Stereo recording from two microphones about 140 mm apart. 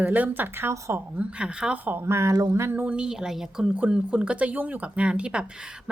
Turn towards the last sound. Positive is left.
turn(degrees=-5)  # may be behind; listen again after turning